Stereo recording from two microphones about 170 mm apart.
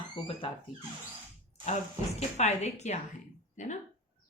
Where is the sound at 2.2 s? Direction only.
40° left (ahead or behind).